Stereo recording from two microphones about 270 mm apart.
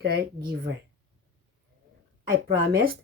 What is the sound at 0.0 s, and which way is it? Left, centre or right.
Speech, right.